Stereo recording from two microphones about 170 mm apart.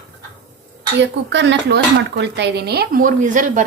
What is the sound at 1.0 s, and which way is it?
Speech, 90° right.